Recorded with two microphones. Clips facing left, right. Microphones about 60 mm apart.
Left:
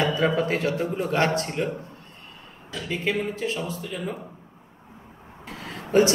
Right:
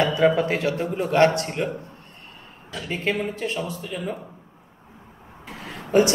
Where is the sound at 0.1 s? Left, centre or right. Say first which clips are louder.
Right 4 dB; centre.